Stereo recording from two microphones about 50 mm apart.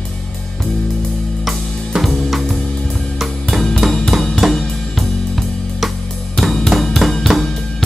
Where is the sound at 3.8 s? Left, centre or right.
Centre.